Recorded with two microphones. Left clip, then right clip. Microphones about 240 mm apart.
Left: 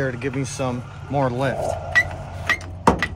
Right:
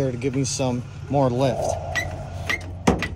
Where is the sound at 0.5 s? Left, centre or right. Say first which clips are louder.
Right 1 dB; centre.